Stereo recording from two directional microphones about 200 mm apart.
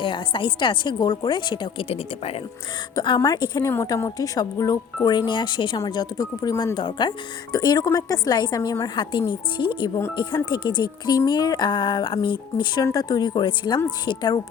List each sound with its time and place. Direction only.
0.0 s speech: 25° left (ahead or behind)